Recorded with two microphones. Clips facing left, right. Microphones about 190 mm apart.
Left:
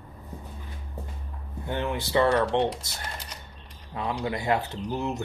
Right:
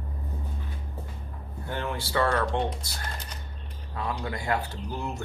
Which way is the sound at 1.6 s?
20° left (ahead or behind).